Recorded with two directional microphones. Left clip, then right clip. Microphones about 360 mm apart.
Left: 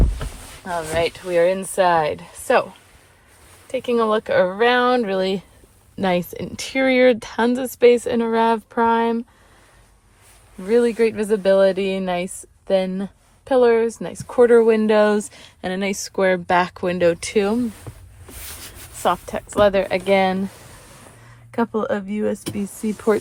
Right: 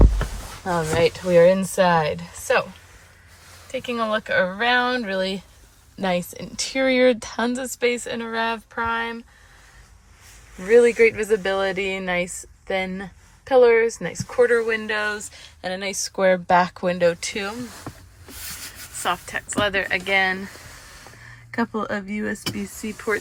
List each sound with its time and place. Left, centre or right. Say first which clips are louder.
0.6 s speech: right 1 dB; centre
3.7 s speech: left 5 dB; centre
10.7 s speech: right 2 dB; centre
19.0 s speech: left 4 dB; centre
21.5 s speech: left 4 dB; centre